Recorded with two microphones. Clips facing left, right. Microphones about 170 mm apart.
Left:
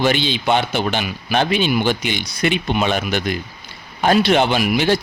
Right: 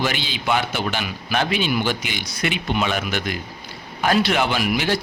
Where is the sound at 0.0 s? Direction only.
25° left (ahead or behind).